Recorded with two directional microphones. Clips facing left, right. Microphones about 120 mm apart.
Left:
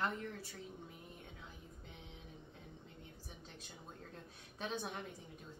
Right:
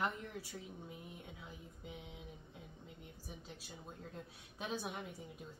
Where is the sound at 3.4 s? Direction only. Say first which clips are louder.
Right 2 dB; 5° right (ahead or behind).